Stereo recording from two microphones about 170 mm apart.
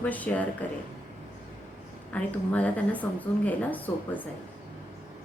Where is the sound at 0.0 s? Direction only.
10° left (ahead or behind).